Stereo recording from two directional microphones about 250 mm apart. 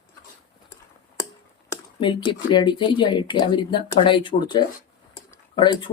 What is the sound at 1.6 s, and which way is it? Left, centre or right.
Speech, centre.